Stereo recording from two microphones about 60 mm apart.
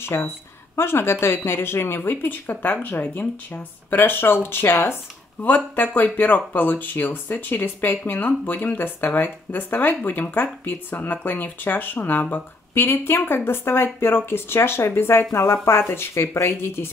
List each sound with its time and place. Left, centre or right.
0.0 s speech: left
6.1 s speech: left